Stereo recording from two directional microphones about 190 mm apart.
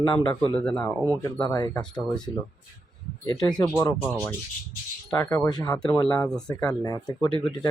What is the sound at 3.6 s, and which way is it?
Speech, 20° left (ahead or behind).